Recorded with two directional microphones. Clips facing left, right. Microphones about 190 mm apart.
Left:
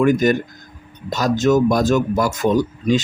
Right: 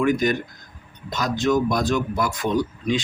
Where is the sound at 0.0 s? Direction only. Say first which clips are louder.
Left 5 dB; 45° left (ahead or behind).